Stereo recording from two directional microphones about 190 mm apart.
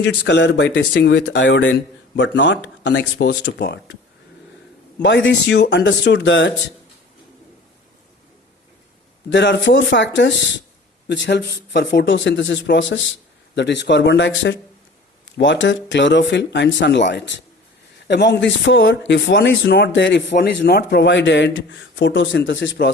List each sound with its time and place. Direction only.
0.0 s speech: 65° left (ahead or behind)
5.0 s speech: 70° left (ahead or behind)
9.3 s speech: 65° left (ahead or behind)